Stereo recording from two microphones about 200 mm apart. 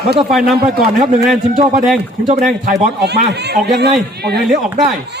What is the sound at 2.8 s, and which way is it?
A man's voice, 55° right (ahead or behind).